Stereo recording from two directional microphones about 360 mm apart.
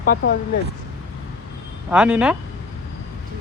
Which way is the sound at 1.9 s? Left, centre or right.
Centre.